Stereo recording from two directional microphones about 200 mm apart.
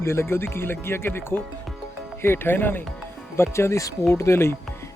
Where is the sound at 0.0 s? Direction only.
15° left (ahead or behind).